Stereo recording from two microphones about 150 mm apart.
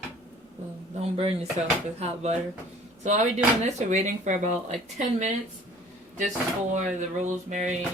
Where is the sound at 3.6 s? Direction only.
50° right (ahead or behind).